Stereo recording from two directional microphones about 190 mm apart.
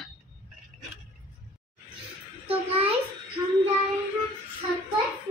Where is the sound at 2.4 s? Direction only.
30° right (ahead or behind).